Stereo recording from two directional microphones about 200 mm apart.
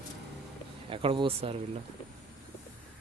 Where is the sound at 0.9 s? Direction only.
25° right (ahead or behind).